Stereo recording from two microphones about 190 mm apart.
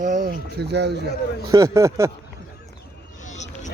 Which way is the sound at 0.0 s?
40° right (ahead or behind).